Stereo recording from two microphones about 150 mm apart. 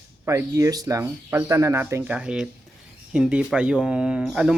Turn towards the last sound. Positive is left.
turn(degrees=-5)  # may be behind; listen again after turning